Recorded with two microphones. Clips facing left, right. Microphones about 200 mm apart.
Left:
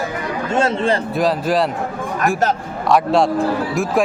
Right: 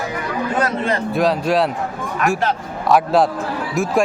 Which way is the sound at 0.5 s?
30° left (ahead or behind).